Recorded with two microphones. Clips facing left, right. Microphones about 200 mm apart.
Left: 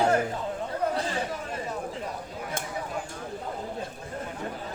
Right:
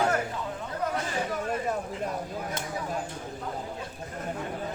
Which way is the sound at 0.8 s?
30° left (ahead or behind).